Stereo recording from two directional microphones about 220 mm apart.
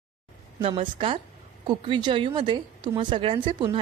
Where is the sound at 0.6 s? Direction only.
25° right (ahead or behind).